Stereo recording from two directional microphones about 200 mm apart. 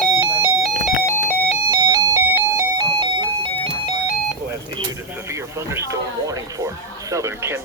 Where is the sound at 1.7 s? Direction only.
20° right (ahead or behind).